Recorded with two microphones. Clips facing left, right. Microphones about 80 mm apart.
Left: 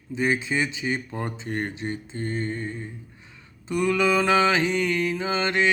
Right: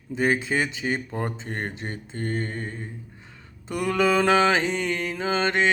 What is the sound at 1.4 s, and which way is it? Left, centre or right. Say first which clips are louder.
Mantra: left 2 dB; right.